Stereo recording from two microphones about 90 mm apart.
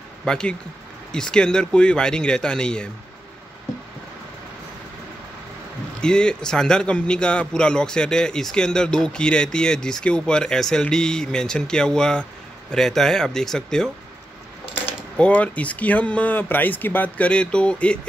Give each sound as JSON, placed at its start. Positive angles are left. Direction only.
{"t": 0.2, "sound": "a man's voice", "side_deg": 10}
{"t": 5.9, "sound": "a man's voice", "side_deg": 10}
{"t": 15.1, "sound": "a man's voice", "side_deg": 15}